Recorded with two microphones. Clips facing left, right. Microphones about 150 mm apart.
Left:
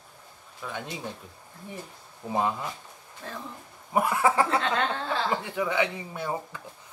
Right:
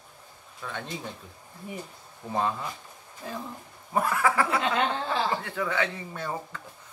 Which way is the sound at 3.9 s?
20° left (ahead or behind).